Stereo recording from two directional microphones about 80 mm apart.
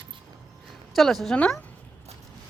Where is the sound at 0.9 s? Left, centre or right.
Centre.